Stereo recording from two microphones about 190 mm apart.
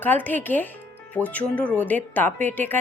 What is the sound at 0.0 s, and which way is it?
Speech, 10° left (ahead or behind).